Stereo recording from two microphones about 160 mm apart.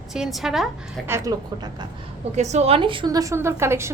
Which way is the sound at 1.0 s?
20° right (ahead or behind).